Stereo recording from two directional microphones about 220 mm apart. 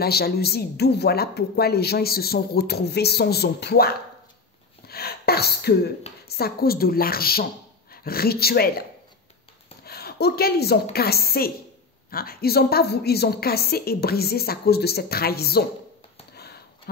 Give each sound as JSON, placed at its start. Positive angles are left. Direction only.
{"t": 0.0, "sound": "a woman's voice", "side_deg": 45}
{"t": 4.8, "sound": "gasp", "side_deg": 45}
{"t": 6.2, "sound": "a woman's voice", "side_deg": 45}
{"t": 9.8, "sound": "a woman's voice", "side_deg": 45}
{"t": 16.3, "sound": "a sound", "side_deg": 45}